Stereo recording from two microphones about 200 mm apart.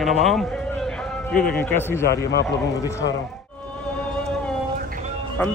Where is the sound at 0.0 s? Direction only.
Centre (ahead or behind).